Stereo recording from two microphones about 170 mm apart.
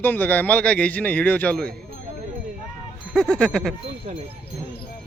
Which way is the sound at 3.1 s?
5° left (ahead or behind).